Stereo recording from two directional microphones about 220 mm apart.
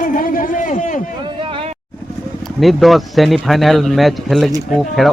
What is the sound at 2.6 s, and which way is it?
Speech, centre (ahead or behind).